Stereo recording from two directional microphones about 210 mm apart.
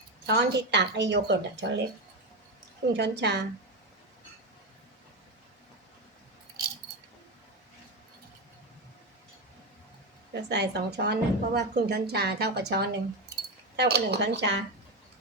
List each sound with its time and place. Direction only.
0.3 s speech: 55° right (ahead or behind)
2.9 s a woman's voice: 55° right (ahead or behind)
10.3 s a woman's voice: 55° right (ahead or behind)